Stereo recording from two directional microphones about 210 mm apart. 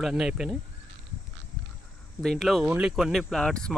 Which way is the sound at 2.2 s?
Centre (ahead or behind).